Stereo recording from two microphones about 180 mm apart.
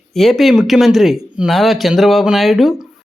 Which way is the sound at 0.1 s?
Centre (ahead or behind).